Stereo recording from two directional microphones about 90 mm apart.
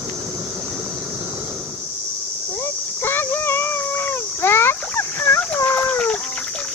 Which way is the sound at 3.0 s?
25° left (ahead or behind).